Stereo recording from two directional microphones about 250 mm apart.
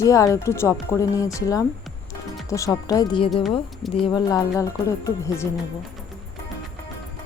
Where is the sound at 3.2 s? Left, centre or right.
Centre.